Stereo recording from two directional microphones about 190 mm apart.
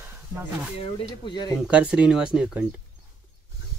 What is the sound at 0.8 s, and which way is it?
Speech, 25° left (ahead or behind).